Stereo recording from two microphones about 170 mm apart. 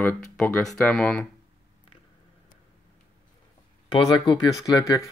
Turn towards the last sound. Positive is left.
turn(degrees=20)  # may be behind; listen again after turning